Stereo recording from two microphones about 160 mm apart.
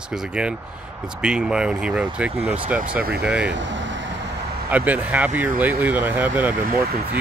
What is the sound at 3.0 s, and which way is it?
Speech, 80° right.